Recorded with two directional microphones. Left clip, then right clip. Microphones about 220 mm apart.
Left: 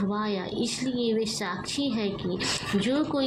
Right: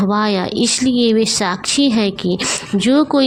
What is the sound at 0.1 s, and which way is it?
A woman's voice, 40° right (ahead or behind).